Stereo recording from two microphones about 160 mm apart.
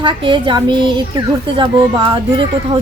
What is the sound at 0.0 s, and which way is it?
A woman's voice, 30° right (ahead or behind).